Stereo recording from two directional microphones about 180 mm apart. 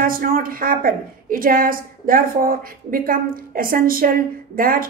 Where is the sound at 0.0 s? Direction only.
50° right (ahead or behind).